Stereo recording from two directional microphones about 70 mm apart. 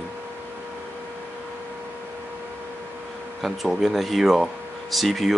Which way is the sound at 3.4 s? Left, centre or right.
Centre.